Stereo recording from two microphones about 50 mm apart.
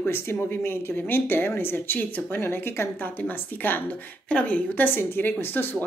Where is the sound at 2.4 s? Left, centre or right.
Left.